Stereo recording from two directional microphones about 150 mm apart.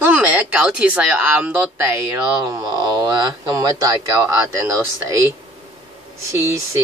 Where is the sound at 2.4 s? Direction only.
25° right (ahead or behind).